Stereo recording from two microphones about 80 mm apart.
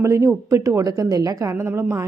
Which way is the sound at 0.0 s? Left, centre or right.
Right.